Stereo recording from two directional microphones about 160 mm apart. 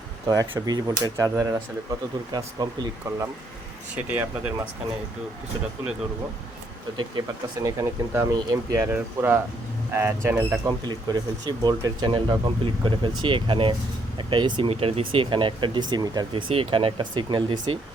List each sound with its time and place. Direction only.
0.3 s speech: 25° right (ahead or behind)
3.9 s speech: 10° right (ahead or behind)
7.6 s speech: 20° right (ahead or behind)
10.8 s speech: 25° right (ahead or behind)